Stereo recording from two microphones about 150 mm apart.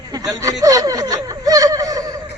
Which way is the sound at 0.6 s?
25° right (ahead or behind).